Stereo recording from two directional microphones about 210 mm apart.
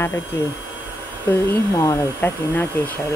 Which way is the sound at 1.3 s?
10° left (ahead or behind).